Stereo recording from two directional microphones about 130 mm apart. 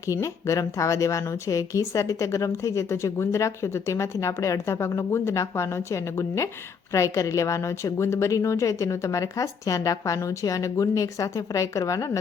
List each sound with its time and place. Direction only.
0.1 s a woman's voice: 25° left (ahead or behind)